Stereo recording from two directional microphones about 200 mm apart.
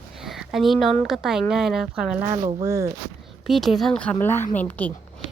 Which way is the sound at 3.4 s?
Centre (ahead or behind).